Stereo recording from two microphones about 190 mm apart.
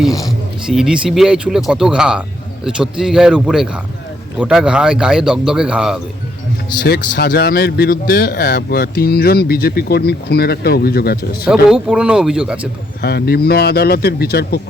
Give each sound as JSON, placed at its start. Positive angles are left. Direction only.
{"t": 0.7, "sound": "a man's voice", "side_deg": -5}
{"t": 6.8, "sound": "speech", "side_deg": 55}
{"t": 11.4, "sound": "a man's voice", "side_deg": -5}
{"t": 13.0, "sound": "speech", "side_deg": 55}